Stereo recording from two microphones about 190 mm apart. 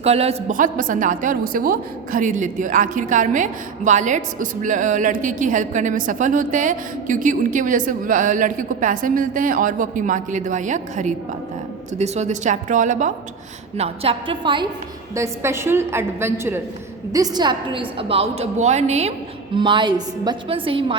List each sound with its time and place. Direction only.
0.0 s a woman's voice: 35° right (ahead or behind)
13.7 s a woman's voice: 30° right (ahead or behind)
15.1 s a woman's voice: 15° right (ahead or behind); by 19.1 s 35° right (ahead or behind)
19.5 s a woman's voice: 25° right (ahead or behind)